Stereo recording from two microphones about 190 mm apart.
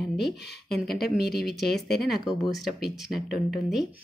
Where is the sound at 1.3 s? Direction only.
Centre (ahead or behind).